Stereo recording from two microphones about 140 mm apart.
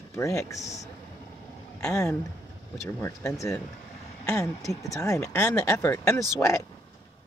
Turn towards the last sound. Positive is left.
turn(degrees=25)  # may be behind; listen again after turning